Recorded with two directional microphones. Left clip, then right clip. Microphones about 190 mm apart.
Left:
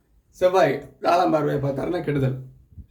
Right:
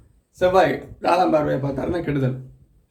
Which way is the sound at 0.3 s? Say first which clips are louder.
Right 1 dB; 25° right (ahead or behind).